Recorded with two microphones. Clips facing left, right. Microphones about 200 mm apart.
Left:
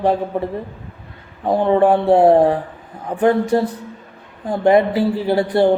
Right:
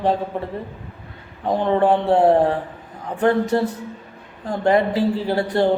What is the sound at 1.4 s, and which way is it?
A man's voice, 10° left (ahead or behind).